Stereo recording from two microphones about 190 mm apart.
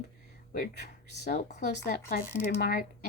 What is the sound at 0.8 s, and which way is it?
Speech, 60° right (ahead or behind).